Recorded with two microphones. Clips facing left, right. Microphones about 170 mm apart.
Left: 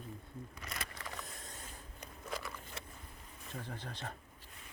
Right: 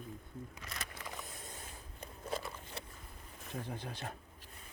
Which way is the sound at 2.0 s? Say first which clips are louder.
Right 3 dB; 25° right (ahead or behind).